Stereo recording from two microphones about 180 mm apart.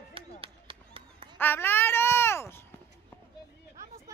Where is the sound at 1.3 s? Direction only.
10° left (ahead or behind).